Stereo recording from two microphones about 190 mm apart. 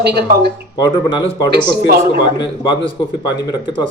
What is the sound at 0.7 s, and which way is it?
Speech, 20° left (ahead or behind).